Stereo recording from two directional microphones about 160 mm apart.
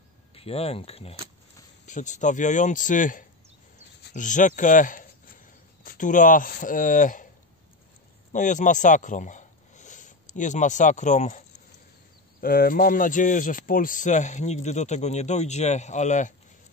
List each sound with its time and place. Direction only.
0.3 s speech: 40° left (ahead or behind)
1.9 s speech: 50° left (ahead or behind)
8.3 s speech: 50° left (ahead or behind)
12.4 s speech: 65° left (ahead or behind)